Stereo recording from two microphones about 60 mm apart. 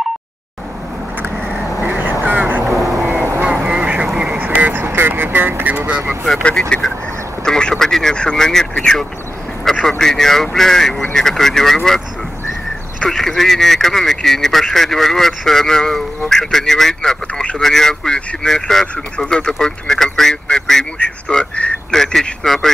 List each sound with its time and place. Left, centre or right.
1.8 s vehicle: right
2.6 s vehicle: right
3.4 s duck: centre
4.4 s vehicle: right
4.8 s speech: right
5.9 s speech: right
6.7 s speech: centre
13.1 s speech: centre
17.3 s speech: left
17.6 s speech: centre